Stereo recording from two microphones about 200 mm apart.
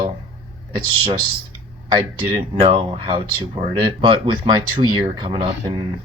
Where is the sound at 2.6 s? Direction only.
25° right (ahead or behind).